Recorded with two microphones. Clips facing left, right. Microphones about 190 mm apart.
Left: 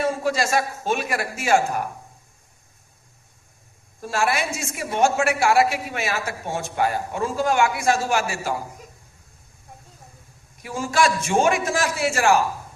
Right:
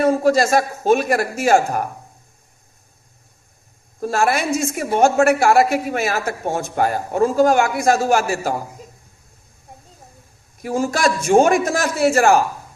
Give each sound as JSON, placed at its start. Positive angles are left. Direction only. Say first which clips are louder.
{"t": 0.0, "sound": "speech", "louder": "right 7 dB", "side_deg": -40}
{"t": 4.0, "sound": "a woman's voice", "louder": "right 5 dB", "side_deg": -40}
{"t": 10.6, "sound": "speech", "louder": "right 3 dB", "side_deg": -40}